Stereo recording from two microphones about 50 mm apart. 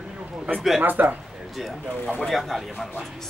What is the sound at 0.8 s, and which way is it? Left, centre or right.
Speech, right.